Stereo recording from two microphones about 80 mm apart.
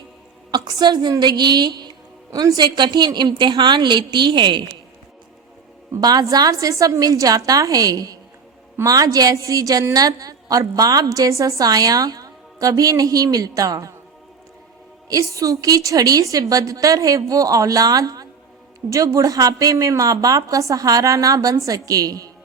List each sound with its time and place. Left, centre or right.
0.5 s a woman's voice: right
1.2 s music: right
2.3 s a woman's voice: right
6.0 s a woman's voice: right
15.1 s a woman's voice: right